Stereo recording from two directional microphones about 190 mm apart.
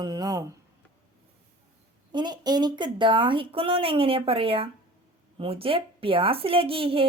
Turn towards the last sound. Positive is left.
turn(degrees=-30)  # may be behind; listen again after turning